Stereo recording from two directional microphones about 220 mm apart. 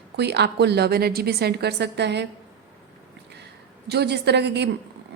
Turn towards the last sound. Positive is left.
turn(degrees=-50)  # may be behind; listen again after turning